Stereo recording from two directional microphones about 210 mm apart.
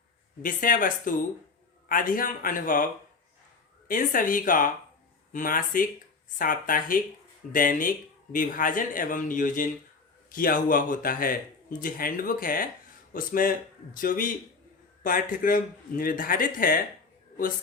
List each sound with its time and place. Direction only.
0.4 s speech: 40° left (ahead or behind)